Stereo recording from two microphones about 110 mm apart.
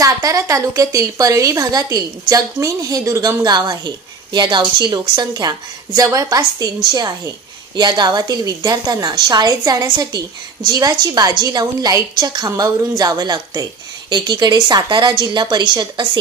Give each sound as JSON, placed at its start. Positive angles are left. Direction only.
{"t": 0.0, "sound": "a woman's voice", "side_deg": -30}